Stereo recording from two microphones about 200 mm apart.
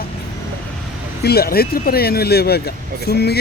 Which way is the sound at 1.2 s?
50° left (ahead or behind).